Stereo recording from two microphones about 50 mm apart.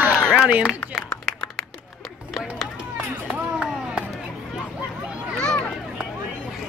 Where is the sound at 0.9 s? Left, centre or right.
Centre.